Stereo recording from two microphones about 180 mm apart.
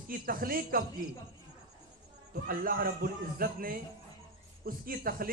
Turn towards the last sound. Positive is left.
turn(degrees=-55)  # may be behind; listen again after turning